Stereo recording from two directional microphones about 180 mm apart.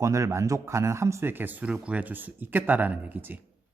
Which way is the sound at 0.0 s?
15° right (ahead or behind).